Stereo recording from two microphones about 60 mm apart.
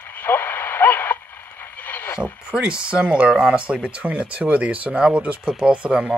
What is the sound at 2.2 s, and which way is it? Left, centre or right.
Speech, centre.